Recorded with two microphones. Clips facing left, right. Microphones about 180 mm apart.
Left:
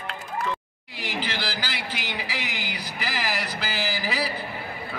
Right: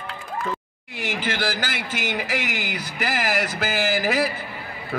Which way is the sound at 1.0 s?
45° right (ahead or behind).